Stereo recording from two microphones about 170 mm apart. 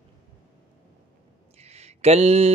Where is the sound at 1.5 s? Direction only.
40° right (ahead or behind).